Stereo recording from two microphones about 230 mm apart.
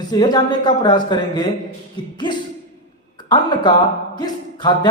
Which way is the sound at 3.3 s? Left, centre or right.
Centre.